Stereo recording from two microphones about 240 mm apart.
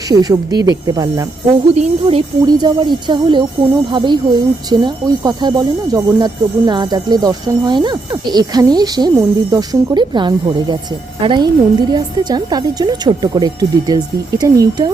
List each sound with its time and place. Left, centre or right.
0.1 s speech: centre
1.7 s speech: right